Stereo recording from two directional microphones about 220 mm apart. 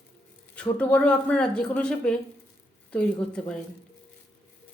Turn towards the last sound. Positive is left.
turn(degrees=5)  # may be behind; listen again after turning